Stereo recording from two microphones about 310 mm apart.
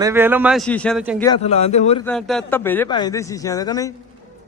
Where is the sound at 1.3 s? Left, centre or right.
Centre.